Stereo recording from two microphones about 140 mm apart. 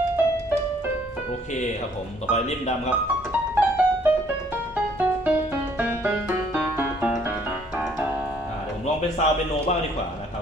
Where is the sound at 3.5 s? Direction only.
10° right (ahead or behind).